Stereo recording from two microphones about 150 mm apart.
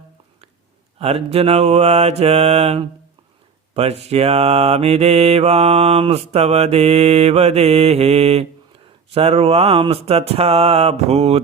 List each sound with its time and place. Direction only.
0.9 s mantra: 45° right (ahead or behind)
4.0 s mantra: 45° right (ahead or behind)